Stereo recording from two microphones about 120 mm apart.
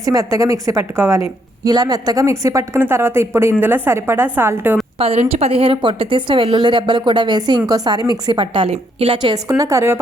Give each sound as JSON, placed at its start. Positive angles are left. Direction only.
{"t": 0.0, "sound": "a woman's voice", "side_deg": -30}
{"t": 4.9, "sound": "a woman's voice", "side_deg": -50}
{"t": 9.3, "sound": "a woman's voice", "side_deg": -30}